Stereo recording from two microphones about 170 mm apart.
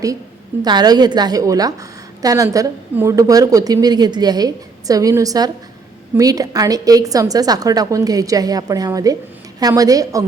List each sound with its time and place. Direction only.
0.6 s a woman's voice: 25° right (ahead or behind)